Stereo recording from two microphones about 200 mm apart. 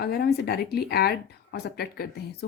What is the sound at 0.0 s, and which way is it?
Speech, 55° left (ahead or behind).